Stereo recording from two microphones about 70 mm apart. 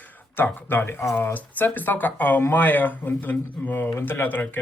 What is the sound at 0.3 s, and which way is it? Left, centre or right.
Speech, left.